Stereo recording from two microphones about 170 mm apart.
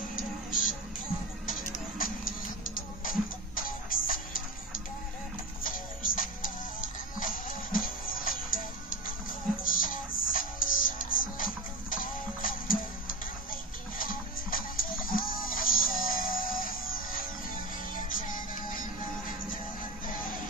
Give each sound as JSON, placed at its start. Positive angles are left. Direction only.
{"t": 0.1, "sound": "music", "side_deg": 50}